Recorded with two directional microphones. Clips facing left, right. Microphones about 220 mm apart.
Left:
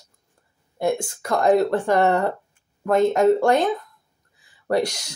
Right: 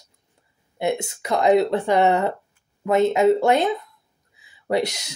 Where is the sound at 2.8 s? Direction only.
5° right (ahead or behind).